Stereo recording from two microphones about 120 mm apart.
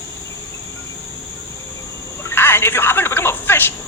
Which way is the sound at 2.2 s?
15° left (ahead or behind).